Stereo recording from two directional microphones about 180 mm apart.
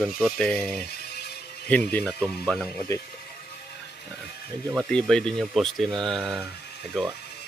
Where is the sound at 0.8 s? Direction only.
65° left (ahead or behind).